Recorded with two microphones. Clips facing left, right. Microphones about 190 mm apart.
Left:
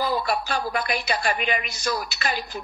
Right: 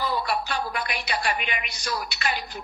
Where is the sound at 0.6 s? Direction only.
40° left (ahead or behind).